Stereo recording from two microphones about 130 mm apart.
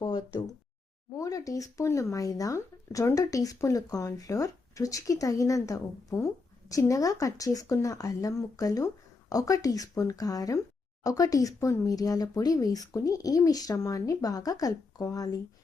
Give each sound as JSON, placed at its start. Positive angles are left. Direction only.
{"t": 0.0, "sound": "speech", "side_deg": 30}